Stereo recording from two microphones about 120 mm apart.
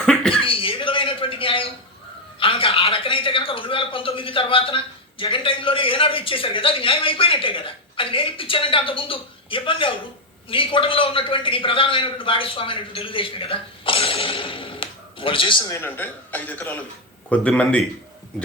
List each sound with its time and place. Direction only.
0.0 s cough: 5° left (ahead or behind)
0.4 s a sound: 50° left (ahead or behind)
2.4 s speech: 50° left (ahead or behind)
15.6 s a man's voice: 20° left (ahead or behind)